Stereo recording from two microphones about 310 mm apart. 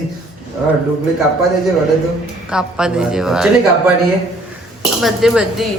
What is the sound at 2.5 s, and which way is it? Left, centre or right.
Speech, centre.